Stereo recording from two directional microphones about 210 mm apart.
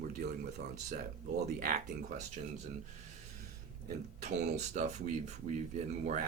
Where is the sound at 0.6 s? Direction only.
50° right (ahead or behind).